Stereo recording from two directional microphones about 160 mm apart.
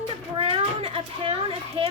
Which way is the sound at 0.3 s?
35° right (ahead or behind).